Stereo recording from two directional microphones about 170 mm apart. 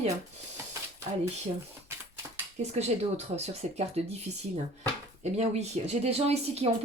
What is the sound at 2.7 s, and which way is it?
A woman's voice, 40° right (ahead or behind).